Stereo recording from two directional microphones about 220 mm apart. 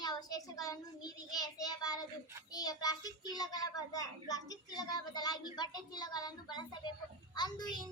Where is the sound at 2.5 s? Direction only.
15° left (ahead or behind).